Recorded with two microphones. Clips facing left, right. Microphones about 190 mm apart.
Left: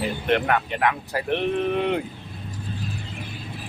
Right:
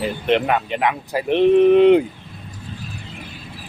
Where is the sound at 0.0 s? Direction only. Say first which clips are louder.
Right 4 dB; 20° right (ahead or behind).